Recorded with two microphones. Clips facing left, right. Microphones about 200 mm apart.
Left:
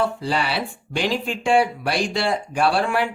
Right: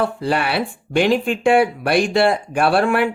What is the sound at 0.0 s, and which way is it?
Speech, 55° right (ahead or behind).